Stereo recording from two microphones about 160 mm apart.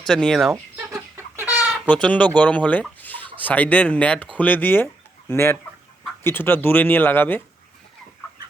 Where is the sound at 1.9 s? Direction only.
10° left (ahead or behind).